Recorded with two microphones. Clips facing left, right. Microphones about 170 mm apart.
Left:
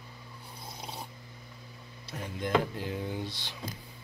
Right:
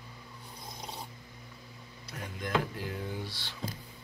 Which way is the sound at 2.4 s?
20° left (ahead or behind).